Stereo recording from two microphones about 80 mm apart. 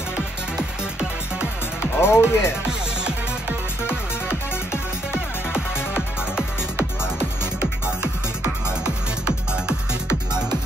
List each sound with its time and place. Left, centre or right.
2.0 s speech: left
5.5 s music: centre
8.8 s music: centre